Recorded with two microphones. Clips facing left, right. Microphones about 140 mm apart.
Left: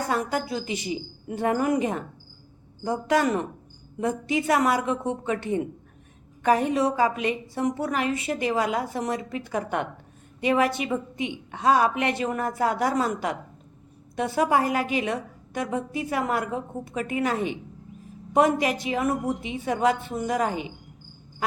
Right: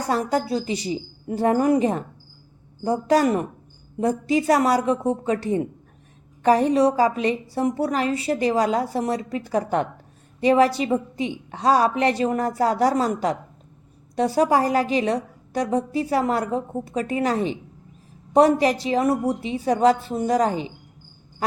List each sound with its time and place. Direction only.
0.1 s a woman's voice: 35° right (ahead or behind)
18.3 s a woman's voice: 35° right (ahead or behind)